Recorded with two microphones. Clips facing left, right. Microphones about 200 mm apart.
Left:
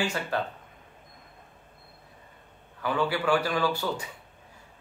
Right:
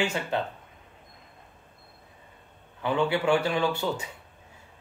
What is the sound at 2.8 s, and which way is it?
Speech, 25° right (ahead or behind).